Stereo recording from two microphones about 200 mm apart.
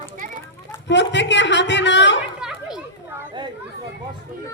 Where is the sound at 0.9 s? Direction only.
60° left (ahead or behind).